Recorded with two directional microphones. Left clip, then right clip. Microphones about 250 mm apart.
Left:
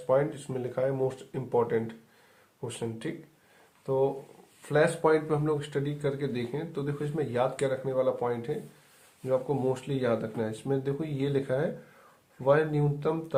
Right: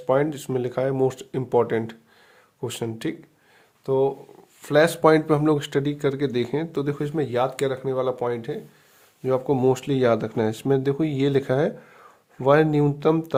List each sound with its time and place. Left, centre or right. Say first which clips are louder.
0.1 s speech: right 5 dB; right